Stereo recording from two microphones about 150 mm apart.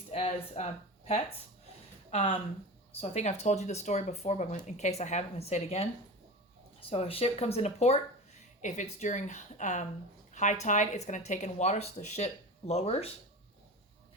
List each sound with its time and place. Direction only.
0.1 s speech: 45° left (ahead or behind)
6.9 s speech: 40° left (ahead or behind)